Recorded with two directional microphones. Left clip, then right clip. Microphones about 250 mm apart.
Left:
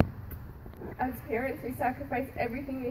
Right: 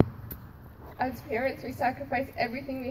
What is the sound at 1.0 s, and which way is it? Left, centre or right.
A woman's voice, left.